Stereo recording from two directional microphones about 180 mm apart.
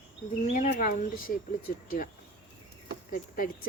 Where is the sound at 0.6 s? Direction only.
50° left (ahead or behind).